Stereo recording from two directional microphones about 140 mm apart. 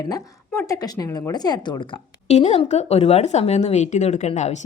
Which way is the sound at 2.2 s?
50° left (ahead or behind).